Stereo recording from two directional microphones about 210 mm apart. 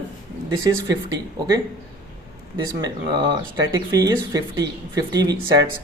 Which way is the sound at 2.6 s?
20° right (ahead or behind).